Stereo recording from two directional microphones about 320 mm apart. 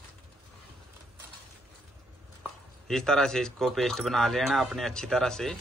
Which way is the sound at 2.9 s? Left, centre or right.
Centre.